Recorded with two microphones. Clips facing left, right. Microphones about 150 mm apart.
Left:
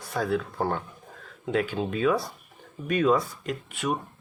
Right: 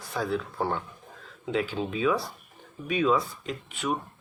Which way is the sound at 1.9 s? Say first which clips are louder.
Left 2 dB; 50° left (ahead or behind).